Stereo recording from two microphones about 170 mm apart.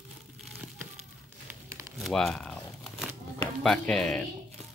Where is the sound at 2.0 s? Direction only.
5° left (ahead or behind).